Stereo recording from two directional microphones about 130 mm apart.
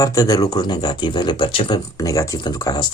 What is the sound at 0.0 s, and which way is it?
Speech, 25° left (ahead or behind).